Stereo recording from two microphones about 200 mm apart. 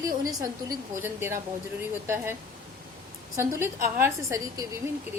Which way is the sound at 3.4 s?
10° right (ahead or behind).